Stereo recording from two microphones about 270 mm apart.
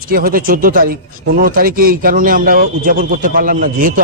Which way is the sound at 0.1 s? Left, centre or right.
Right.